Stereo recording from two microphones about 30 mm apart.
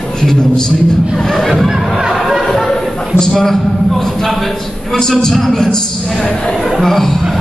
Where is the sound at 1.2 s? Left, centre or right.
Centre.